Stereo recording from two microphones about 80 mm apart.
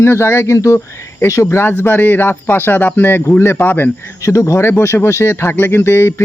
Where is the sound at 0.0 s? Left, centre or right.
Left.